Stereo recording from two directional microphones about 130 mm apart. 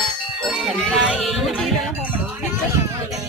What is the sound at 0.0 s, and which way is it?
Music, 5° right (ahead or behind).